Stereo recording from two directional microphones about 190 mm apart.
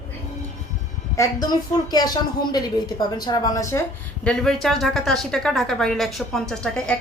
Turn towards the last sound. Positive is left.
turn(degrees=5)  # may be behind; listen again after turning